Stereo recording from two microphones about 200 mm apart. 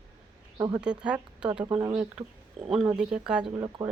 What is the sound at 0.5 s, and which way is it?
Speech, 20° right (ahead or behind).